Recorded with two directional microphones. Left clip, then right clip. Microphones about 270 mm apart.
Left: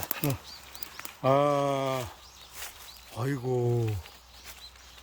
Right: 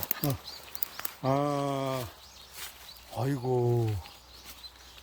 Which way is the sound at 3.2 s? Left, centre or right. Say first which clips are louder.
Right 1 dB; centre.